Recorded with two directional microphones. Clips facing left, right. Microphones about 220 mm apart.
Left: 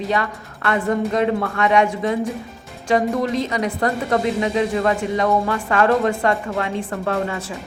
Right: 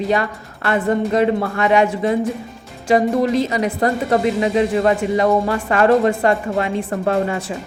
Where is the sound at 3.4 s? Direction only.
5° right (ahead or behind).